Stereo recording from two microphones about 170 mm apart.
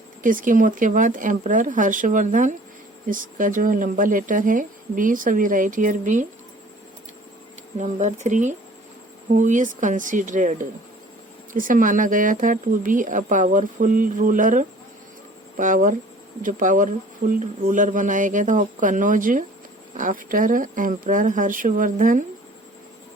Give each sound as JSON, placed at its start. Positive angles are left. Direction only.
{"t": 0.2, "sound": "a woman's voice", "side_deg": -50}
{"t": 7.8, "sound": "a woman's voice", "side_deg": -45}